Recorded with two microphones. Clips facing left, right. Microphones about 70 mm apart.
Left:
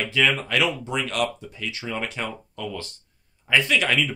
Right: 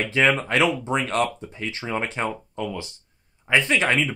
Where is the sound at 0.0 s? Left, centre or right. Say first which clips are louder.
Right 2 dB; right.